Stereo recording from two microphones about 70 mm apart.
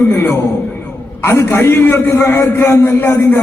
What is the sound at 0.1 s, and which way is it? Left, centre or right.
A man's voice, left.